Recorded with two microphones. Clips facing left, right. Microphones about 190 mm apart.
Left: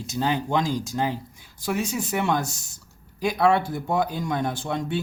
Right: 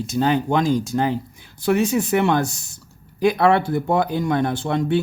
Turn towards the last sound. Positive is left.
turn(degrees=-65)  # may be behind; listen again after turning